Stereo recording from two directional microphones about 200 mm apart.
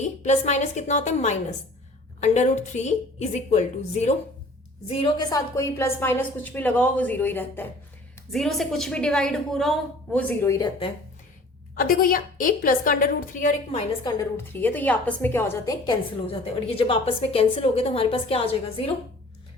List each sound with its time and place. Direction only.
0.0 s a woman's voice: 35° left (ahead or behind); by 10.7 s 15° left (ahead or behind)
11.7 s a woman's voice: 45° left (ahead or behind)
14.0 s a woman's voice: 20° left (ahead or behind)
16.2 s a woman's voice: 30° left (ahead or behind)